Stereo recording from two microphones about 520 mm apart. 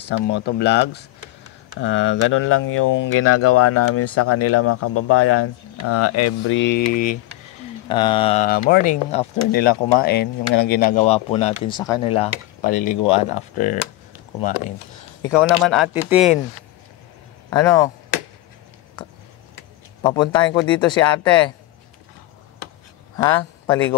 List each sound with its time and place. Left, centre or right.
0.0 s speech: centre
15.2 s speech: centre
17.5 s speech: centre
20.0 s speech: centre
23.1 s speech: centre